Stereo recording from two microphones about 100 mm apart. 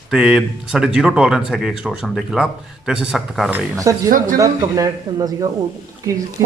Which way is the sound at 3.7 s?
35° right (ahead or behind).